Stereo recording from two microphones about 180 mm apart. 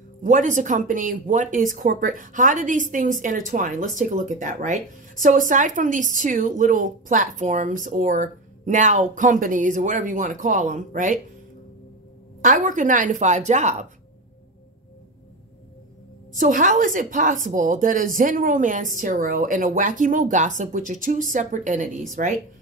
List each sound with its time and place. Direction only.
0.2 s a woman's voice: 45° right (ahead or behind)
12.4 s a woman's voice: 45° right (ahead or behind)
16.3 s a woman's voice: 45° right (ahead or behind)